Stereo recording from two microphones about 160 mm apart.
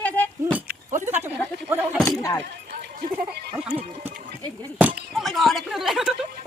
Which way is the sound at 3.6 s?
5° right (ahead or behind).